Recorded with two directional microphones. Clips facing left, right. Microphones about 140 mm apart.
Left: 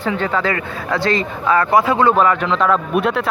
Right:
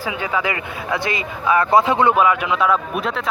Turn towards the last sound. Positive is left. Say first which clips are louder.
# left 6 dB
turn(degrees=0)  # may be behind; listen again after turning